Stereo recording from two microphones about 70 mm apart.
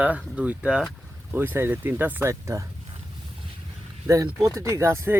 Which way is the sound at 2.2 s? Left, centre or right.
Right.